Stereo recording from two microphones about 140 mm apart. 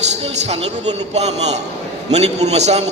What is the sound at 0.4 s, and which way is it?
A man's voice, 50° right (ahead or behind).